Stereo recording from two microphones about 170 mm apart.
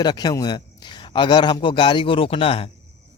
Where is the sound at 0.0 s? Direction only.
25° left (ahead or behind).